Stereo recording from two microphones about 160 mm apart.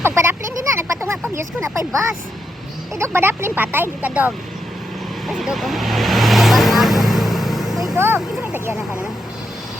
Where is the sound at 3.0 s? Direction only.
15° right (ahead or behind).